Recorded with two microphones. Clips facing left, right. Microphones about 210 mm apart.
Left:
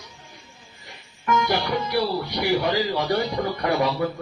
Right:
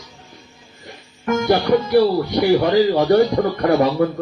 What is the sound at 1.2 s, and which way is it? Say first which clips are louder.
Speech: right 6 dB; 50° right (ahead or behind).